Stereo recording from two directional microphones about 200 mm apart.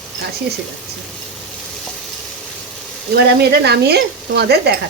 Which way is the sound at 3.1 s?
55° right (ahead or behind).